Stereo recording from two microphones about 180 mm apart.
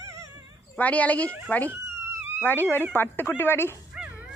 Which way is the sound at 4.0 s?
5° right (ahead or behind).